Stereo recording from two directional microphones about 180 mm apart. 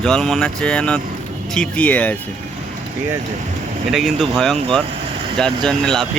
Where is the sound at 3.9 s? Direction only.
Centre (ahead or behind).